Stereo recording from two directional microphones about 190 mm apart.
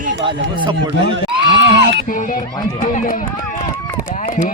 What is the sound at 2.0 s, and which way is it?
Speech, 45° left (ahead or behind).